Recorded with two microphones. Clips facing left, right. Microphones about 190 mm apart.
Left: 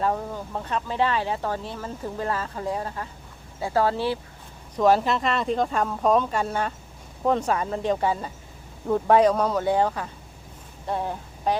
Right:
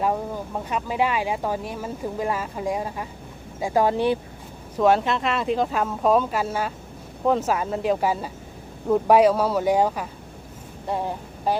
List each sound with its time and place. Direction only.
0.0 s speech: 10° right (ahead or behind)
4.8 s speech: centre (ahead or behind)